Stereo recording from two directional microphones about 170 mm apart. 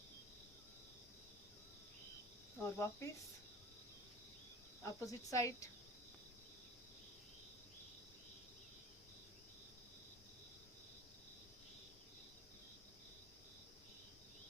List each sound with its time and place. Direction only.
2.6 s speech: 15° left (ahead or behind)
4.9 s speech: 15° left (ahead or behind)